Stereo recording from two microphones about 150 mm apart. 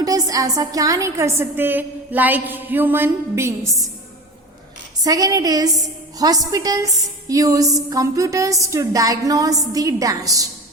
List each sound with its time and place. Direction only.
0.0 s a woman's voice: 25° right (ahead or behind)
5.0 s a woman's voice: 25° right (ahead or behind)